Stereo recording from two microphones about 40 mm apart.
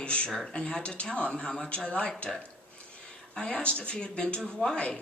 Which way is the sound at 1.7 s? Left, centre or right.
Left.